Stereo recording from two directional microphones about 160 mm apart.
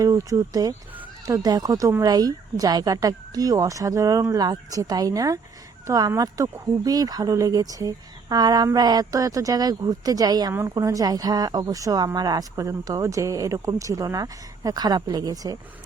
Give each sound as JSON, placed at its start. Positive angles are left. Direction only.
{"t": 0.0, "sound": "speech", "side_deg": -20}